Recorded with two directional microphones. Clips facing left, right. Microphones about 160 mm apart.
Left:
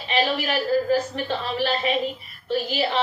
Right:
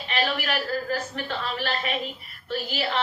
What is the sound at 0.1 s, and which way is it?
A man's voice, 20° left (ahead or behind).